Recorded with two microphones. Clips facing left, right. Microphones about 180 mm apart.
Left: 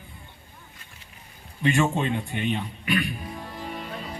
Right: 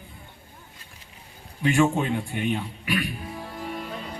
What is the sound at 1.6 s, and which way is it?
A man's voice, 10° right (ahead or behind).